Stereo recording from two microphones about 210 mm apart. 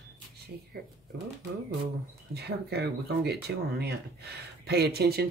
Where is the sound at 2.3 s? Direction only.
50° right (ahead or behind).